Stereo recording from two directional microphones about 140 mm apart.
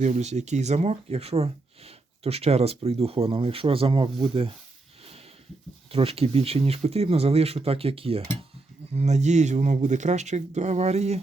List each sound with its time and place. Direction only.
0.0 s speech: 55° right (ahead or behind); by 4.5 s 40° right (ahead or behind)
5.0 s sniff: 45° right (ahead or behind)
5.9 s speech: 45° right (ahead or behind)